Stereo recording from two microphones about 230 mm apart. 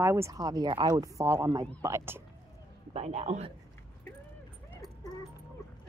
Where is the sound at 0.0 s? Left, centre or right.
Centre.